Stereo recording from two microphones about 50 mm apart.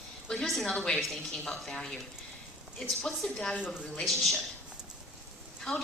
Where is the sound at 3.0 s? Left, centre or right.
Centre.